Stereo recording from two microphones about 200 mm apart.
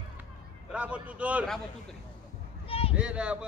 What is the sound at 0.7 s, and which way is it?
A man's voice, 5° right (ahead or behind).